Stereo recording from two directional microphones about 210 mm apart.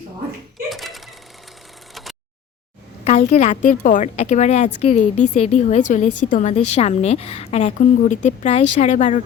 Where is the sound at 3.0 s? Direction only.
35° left (ahead or behind).